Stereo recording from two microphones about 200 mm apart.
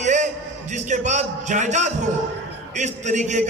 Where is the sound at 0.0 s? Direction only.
35° right (ahead or behind).